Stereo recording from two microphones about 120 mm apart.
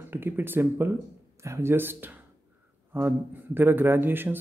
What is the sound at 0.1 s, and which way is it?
A man's voice, 20° right (ahead or behind).